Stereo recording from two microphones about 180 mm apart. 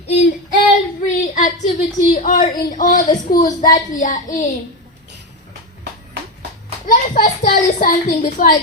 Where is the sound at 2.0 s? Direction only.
50° left (ahead or behind).